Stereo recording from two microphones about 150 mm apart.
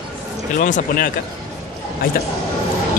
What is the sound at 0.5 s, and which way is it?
Speech, 65° left (ahead or behind).